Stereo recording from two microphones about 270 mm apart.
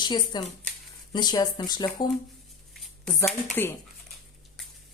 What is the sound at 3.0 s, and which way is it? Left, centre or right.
Speech, centre.